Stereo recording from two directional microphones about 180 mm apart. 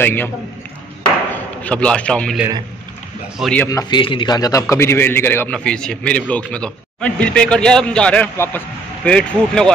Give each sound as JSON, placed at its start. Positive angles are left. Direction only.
{"t": 0.0, "sound": "a man's voice", "side_deg": 10}
{"t": 1.3, "sound": "a man's voice", "side_deg": 5}
{"t": 3.6, "sound": "a man's voice", "side_deg": 20}